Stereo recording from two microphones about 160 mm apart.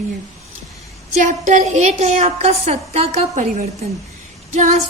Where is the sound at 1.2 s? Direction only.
50° right (ahead or behind).